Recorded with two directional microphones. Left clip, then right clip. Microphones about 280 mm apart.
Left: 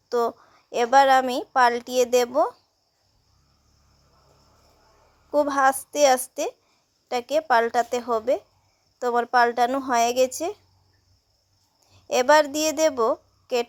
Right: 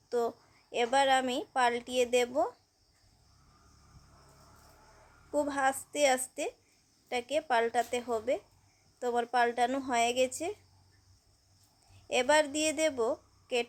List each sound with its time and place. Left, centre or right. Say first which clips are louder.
0.1 s a woman's voice: left 8 dB; left
5.3 s a woman's voice: left 10 dB; left
12.0 s a woman's voice: left 9 dB; left